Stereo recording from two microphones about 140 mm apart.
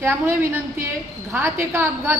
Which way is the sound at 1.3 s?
15° right (ahead or behind).